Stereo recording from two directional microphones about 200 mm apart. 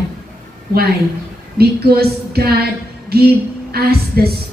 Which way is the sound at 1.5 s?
50° right (ahead or behind).